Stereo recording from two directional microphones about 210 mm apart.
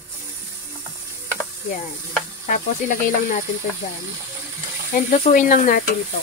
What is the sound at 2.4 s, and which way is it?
Speech, 40° left (ahead or behind).